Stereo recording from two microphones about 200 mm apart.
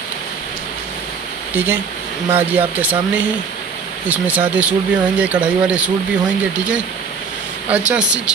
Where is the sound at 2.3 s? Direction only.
10° right (ahead or behind).